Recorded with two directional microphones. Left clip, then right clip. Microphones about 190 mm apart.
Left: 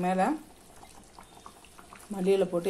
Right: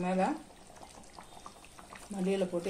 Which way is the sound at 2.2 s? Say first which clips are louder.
Left 7 dB; 40° left (ahead or behind).